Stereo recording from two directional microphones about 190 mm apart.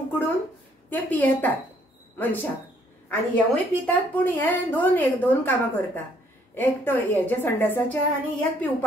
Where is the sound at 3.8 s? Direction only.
10° left (ahead or behind).